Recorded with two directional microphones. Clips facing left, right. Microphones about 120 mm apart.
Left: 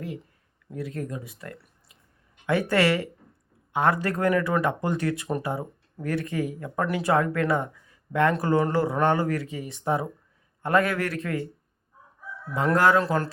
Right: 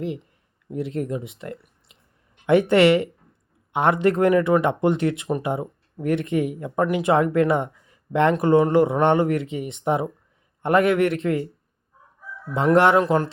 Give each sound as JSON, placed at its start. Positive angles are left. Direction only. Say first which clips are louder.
{"t": 0.7, "sound": "speech", "louder": "right 6 dB", "side_deg": -25}
{"t": 12.5, "sound": "speech", "louder": "right 4 dB", "side_deg": -25}